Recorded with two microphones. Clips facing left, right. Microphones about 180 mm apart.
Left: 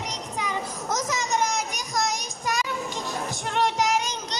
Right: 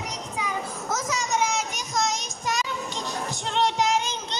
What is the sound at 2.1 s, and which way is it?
Music, 20° right (ahead or behind).